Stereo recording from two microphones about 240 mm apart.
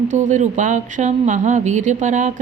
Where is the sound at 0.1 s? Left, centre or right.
Right.